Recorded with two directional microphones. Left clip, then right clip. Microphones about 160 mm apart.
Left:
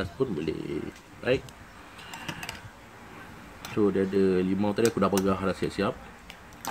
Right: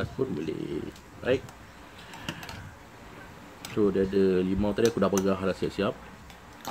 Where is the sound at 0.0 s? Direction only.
25° left (ahead or behind).